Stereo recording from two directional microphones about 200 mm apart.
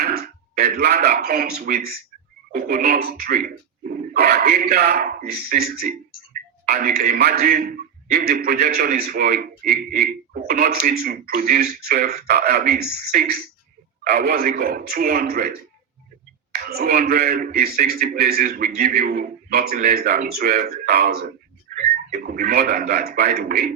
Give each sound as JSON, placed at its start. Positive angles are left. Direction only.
{"t": 0.0, "sound": "a man's voice", "side_deg": -50}
{"t": 16.6, "sound": "a man's voice", "side_deg": -50}